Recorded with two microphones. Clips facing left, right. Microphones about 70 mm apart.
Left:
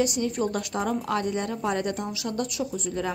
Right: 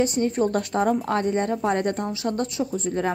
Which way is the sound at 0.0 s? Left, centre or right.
Right.